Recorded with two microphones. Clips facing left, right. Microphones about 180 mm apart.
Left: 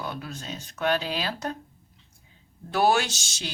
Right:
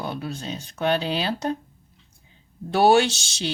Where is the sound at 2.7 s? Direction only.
30° right (ahead or behind).